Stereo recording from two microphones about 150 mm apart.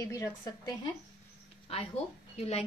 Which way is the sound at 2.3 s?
45° left (ahead or behind).